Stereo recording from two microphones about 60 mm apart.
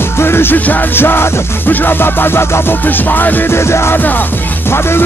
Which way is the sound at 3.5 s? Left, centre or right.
Left.